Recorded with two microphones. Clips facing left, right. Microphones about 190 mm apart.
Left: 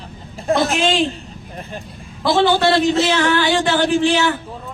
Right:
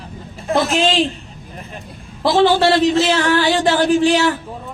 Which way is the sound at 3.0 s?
35° right (ahead or behind).